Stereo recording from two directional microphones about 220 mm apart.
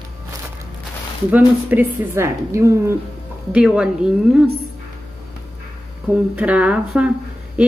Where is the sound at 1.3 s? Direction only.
10° right (ahead or behind).